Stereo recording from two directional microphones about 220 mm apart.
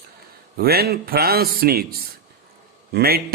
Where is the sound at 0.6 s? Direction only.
45° right (ahead or behind).